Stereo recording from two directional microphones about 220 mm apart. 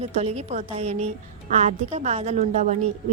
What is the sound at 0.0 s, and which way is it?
A woman's voice, 30° right (ahead or behind).